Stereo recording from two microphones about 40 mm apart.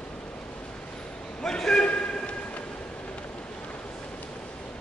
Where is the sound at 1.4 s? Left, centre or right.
Centre.